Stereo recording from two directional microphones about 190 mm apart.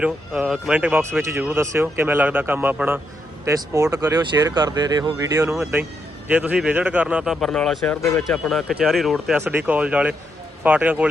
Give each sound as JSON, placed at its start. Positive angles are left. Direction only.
{"t": 0.0, "sound": "speech", "side_deg": -5}
{"t": 8.0, "sound": "speech", "side_deg": 15}
{"t": 8.4, "sound": "speech", "side_deg": 0}